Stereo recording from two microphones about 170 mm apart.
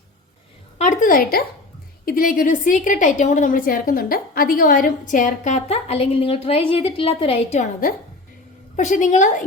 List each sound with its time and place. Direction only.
0.8 s a woman's voice: 45° left (ahead or behind)